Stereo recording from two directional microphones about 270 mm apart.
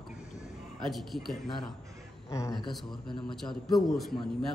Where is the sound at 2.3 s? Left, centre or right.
Centre.